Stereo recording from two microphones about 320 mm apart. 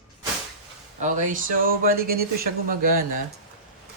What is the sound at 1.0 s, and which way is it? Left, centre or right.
Speech, right.